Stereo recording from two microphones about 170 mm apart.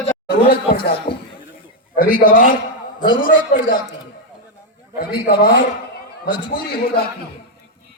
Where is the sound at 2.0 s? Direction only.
50° left (ahead or behind).